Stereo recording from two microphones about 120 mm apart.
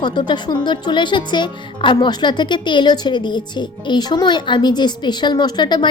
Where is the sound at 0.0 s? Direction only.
40° left (ahead or behind).